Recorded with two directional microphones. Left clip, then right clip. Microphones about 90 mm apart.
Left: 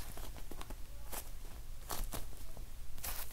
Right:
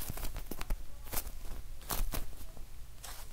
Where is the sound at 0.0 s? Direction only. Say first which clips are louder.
Right 5 dB; 30° right (ahead or behind).